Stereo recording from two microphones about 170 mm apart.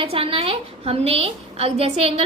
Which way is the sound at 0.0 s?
35° right (ahead or behind).